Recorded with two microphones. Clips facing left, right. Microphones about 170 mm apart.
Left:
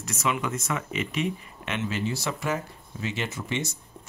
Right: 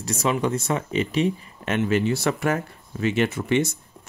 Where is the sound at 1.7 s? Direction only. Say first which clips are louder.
Right 8 dB; 55° right (ahead or behind).